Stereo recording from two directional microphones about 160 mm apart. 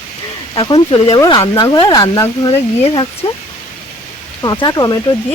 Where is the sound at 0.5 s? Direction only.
30° left (ahead or behind).